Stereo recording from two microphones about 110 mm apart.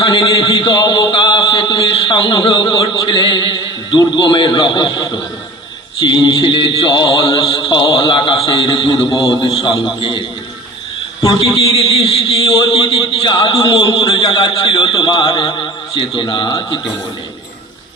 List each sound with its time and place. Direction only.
0.0 s a sound: 45° left (ahead or behind)
4.2 s speech: 45° left (ahead or behind)
11.3 s speech: 55° left (ahead or behind)